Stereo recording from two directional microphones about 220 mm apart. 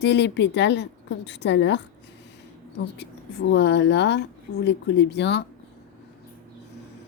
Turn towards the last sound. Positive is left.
turn(degrees=50)  # may be behind; listen again after turning